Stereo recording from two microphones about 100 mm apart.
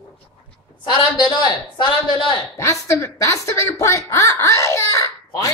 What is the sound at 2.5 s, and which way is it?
A woman's voice, 30° left (ahead or behind).